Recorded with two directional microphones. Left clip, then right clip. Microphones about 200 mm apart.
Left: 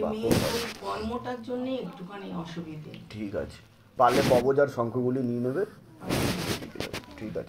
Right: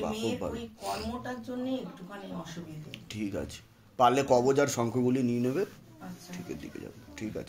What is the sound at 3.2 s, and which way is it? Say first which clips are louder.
A man's voice: left 3 dB; 45° right (ahead or behind).